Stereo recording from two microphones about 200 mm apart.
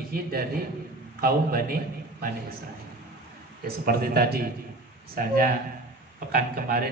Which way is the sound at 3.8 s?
45° right (ahead or behind).